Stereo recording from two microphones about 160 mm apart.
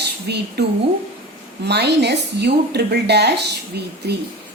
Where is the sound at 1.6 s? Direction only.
90° right.